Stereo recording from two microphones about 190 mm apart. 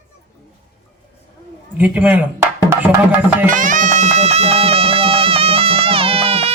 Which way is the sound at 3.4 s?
45° right (ahead or behind).